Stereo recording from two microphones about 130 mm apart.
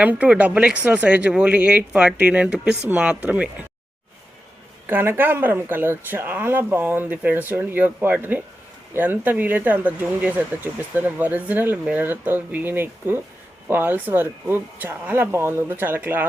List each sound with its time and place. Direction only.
0.0 s speech: 10° right (ahead or behind)
4.9 s speech: 15° right (ahead or behind)